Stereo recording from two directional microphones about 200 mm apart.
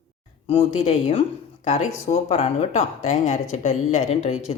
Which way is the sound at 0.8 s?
30° left (ahead or behind).